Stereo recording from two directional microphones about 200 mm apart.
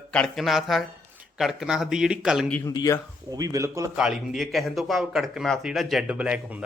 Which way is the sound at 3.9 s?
5° right (ahead or behind).